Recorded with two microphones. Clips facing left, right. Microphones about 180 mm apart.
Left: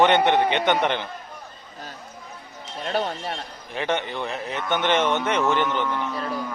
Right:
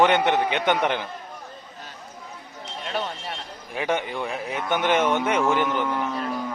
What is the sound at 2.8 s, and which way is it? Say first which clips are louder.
Alarm: left 4 dB; 45° left (ahead or behind).